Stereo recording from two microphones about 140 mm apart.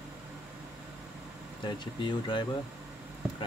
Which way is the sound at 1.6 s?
35° left (ahead or behind).